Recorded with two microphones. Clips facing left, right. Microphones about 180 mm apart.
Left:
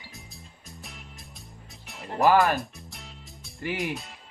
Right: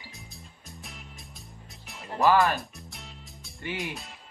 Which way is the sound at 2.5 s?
Centre (ahead or behind).